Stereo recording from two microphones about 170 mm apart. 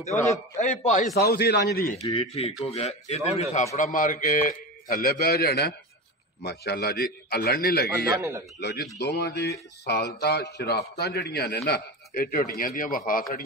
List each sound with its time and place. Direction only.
0.0 s speech: 45° left (ahead or behind)
1.1 s a man's voice: 70° left (ahead or behind)
2.1 s a man's voice: 35° left (ahead or behind); by 8.1 s 65° left (ahead or behind)
8.2 s speech: 15° right (ahead or behind)
8.5 s a man's voice: 75° left (ahead or behind); by 13.2 s 55° left (ahead or behind)